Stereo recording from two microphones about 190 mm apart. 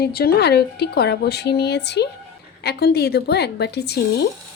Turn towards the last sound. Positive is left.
turn(degrees=60)  # may be behind; listen again after turning